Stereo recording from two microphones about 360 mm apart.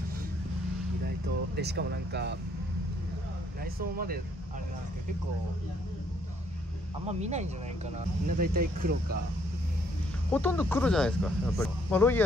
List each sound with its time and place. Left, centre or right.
1.0 s speech: right
3.6 s speech: right
7.1 s speech: centre
10.3 s speech: centre